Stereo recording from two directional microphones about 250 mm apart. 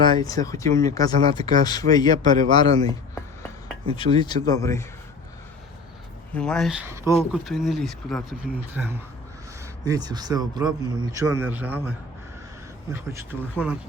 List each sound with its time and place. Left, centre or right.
0.0 s speech: centre
3.9 s speech: centre
6.3 s speech: centre
7.1 s speech: centre
9.8 s a man's voice: centre